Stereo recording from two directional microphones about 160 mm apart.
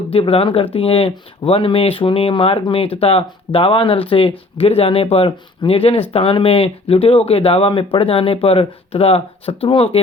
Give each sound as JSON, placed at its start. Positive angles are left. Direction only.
{"t": 0.1, "sound": "speech", "side_deg": 35}